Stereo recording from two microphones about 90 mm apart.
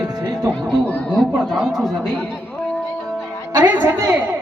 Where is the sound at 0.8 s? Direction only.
15° left (ahead or behind).